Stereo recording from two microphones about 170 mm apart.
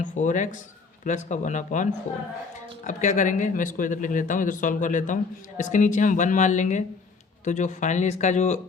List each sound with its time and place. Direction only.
0.0 s a man's voice: 45° left (ahead or behind)